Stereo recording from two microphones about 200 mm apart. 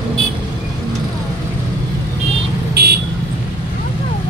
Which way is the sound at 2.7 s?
55° right (ahead or behind).